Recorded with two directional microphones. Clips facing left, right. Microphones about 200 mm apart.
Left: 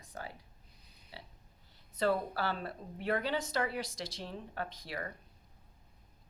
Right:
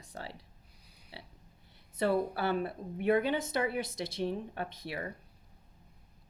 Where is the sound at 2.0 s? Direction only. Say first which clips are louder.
Right 2 dB; 25° right (ahead or behind).